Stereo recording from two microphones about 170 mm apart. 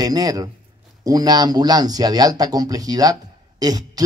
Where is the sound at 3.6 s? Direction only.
25° right (ahead or behind).